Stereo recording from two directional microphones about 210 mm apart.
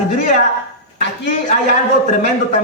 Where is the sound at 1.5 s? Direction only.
35° left (ahead or behind).